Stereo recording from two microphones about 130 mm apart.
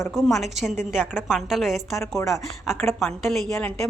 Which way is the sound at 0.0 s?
Centre (ahead or behind).